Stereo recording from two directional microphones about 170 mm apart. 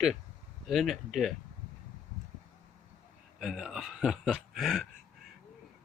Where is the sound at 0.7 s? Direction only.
Centre (ahead or behind).